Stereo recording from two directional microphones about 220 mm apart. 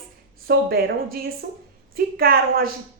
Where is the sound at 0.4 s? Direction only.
45° right (ahead or behind).